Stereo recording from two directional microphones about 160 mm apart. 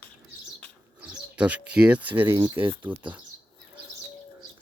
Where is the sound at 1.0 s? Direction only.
10° right (ahead or behind).